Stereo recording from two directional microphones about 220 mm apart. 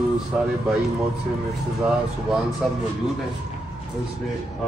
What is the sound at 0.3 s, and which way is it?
Speech, centre (ahead or behind).